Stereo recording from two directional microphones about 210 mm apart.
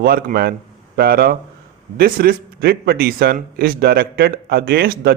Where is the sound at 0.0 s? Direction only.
45° right (ahead or behind).